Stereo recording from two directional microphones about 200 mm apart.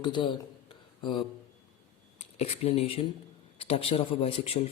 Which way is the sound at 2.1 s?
30° left (ahead or behind).